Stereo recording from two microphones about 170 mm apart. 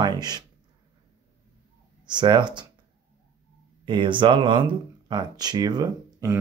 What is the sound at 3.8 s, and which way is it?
Speech, 30° right (ahead or behind).